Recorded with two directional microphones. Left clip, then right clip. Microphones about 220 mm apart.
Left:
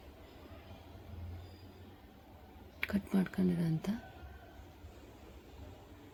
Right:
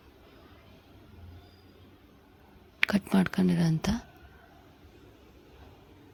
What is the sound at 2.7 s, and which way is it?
Speech, 40° right (ahead or behind).